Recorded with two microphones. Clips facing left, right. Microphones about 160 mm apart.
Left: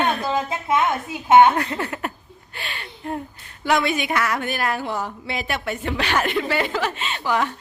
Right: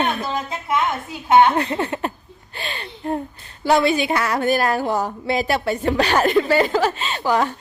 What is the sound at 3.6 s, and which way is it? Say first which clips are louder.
Speech: right 4 dB; 30° right (ahead or behind).